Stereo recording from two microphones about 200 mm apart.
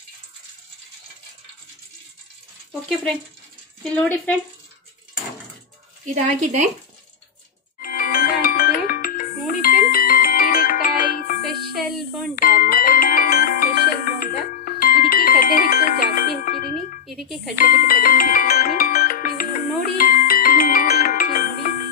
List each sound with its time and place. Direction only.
3.9 s speech: 10° left (ahead or behind)
6.0 s speech: 35° right (ahead or behind)
7.8 s music: 45° left (ahead or behind)
12.4 s music: 45° left (ahead or behind)
17.0 s speech: centre (ahead or behind)
17.6 s music: 45° left (ahead or behind)